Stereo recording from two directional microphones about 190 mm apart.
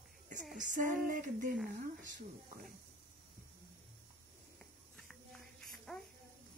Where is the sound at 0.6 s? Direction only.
40° right (ahead or behind).